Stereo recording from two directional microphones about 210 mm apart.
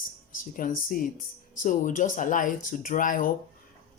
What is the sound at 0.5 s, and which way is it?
Speech, 40° left (ahead or behind).